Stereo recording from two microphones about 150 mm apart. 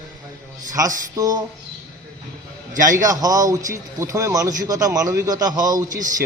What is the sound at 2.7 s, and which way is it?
Speech, 60° right (ahead or behind).